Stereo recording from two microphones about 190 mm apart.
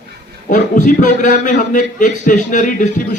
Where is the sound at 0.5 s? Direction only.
40° left (ahead or behind).